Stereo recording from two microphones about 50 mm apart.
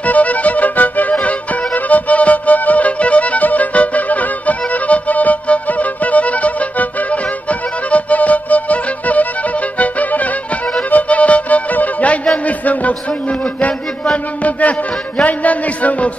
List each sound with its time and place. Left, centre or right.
0.0 s music: left
12.4 s a sound: left
15.2 s music: left